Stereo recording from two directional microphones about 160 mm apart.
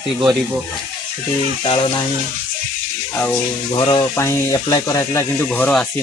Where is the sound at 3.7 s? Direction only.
30° left (ahead or behind).